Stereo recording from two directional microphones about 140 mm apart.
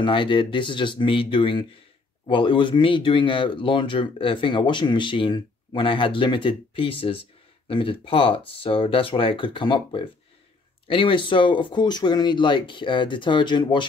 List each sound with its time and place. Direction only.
0.0 s speech: 35° left (ahead or behind)